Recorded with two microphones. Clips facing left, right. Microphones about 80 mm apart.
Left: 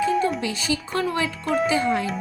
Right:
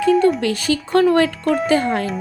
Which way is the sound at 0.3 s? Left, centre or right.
Right.